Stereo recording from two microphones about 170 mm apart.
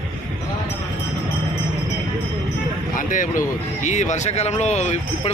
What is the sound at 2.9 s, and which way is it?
A man's voice, 50° left (ahead or behind).